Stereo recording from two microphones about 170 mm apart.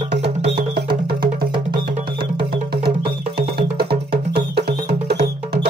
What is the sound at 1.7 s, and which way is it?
Music, 65° right (ahead or behind).